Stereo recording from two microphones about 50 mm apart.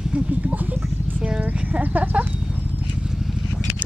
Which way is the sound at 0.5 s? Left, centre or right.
Right.